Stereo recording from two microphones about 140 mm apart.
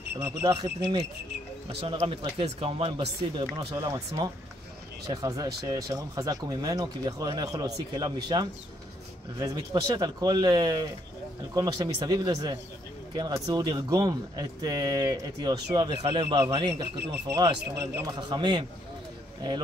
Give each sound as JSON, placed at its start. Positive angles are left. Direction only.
{"t": 0.1, "sound": "speech", "side_deg": -15}
{"t": 1.7, "sound": "speech", "side_deg": -45}
{"t": 3.7, "sound": "speech", "side_deg": -25}
{"t": 16.1, "sound": "speech", "side_deg": -45}
{"t": 16.4, "sound": "speech", "side_deg": -30}
{"t": 18.1, "sound": "a man's voice", "side_deg": -30}